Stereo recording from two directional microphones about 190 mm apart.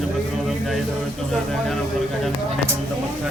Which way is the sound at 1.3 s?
Centre (ahead or behind).